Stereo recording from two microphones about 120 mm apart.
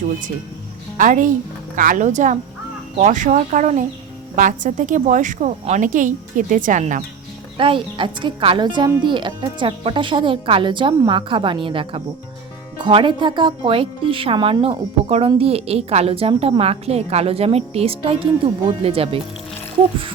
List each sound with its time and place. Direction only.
0.9 s a woman's voice: 90° right
7.6 s a woman's voice: 45° right (ahead or behind)